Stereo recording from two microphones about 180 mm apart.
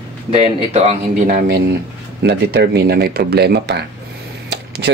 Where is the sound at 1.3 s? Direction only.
60° right (ahead or behind).